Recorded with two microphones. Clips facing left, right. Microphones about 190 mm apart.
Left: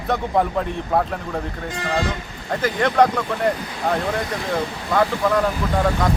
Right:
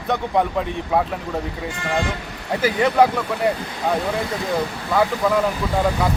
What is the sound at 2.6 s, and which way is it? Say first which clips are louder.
Speech: right 1 dB; 5° right (ahead or behind).